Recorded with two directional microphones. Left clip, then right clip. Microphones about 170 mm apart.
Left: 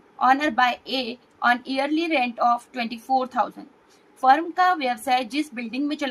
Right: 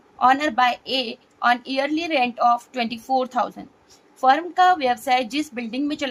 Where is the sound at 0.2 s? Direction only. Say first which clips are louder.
Right 2 dB; 35° right (ahead or behind).